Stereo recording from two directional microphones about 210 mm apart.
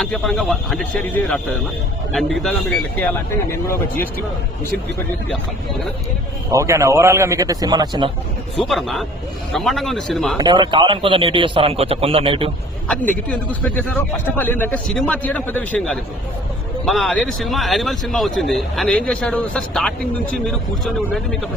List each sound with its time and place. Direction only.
0.0 s a man's voice: centre (ahead or behind)
6.5 s a man's voice: 15° right (ahead or behind)
8.5 s a man's voice: centre (ahead or behind)
10.3 s speech: 20° right (ahead or behind)
12.9 s a man's voice: 5° left (ahead or behind)